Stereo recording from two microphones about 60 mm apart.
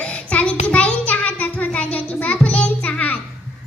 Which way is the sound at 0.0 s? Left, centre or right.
Centre.